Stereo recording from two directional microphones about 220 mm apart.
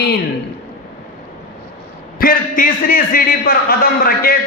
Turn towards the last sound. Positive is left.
turn(degrees=40)  # may be behind; listen again after turning